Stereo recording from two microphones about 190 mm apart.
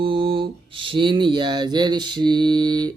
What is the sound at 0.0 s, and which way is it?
Speech, 30° right (ahead or behind).